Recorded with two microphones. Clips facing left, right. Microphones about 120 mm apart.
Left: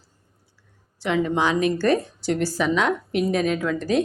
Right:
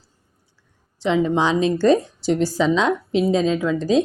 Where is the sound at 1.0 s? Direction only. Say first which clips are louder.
Right 3 dB; 20° right (ahead or behind).